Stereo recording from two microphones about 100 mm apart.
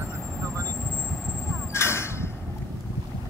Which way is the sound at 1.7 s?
25° left (ahead or behind).